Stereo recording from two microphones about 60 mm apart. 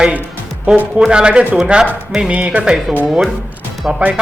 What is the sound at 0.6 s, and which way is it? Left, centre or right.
Speech, right.